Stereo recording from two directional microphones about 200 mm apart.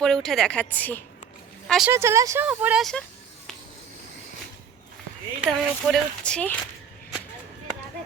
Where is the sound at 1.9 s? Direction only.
15° right (ahead or behind).